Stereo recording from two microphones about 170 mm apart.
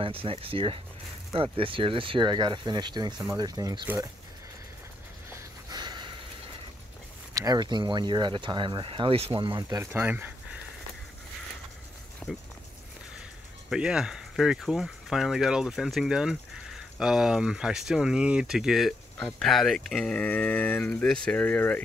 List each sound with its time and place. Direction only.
0.0 s speech: 30° right (ahead or behind); by 4.1 s 15° right (ahead or behind)
5.3 s a sound: 25° right (ahead or behind)
7.3 s speech: 20° right (ahead or behind)
9.9 s speech: 10° right (ahead or behind)
12.2 s speech: 15° left (ahead or behind)
13.7 s speech: 5° right (ahead or behind)